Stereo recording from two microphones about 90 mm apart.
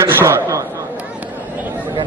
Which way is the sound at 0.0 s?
35° right (ahead or behind).